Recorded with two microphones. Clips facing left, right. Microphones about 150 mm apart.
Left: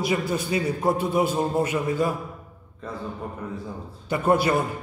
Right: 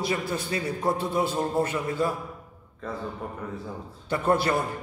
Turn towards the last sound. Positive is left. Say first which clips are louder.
# left 3 dB
turn(degrees=15)  # may be behind; listen again after turning